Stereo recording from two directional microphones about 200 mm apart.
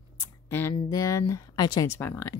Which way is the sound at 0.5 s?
10° left (ahead or behind).